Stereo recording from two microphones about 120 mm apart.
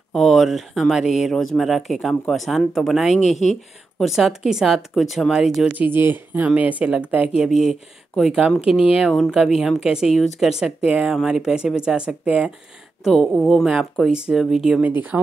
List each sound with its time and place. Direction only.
0.1 s speech: centre (ahead or behind)
5.7 s speech: 15° right (ahead or behind)
8.5 s speech: 50° left (ahead or behind)
9.0 s speech: centre (ahead or behind)